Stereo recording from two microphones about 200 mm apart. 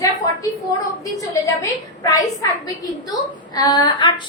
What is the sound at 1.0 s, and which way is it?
A woman's voice, 15° left (ahead or behind).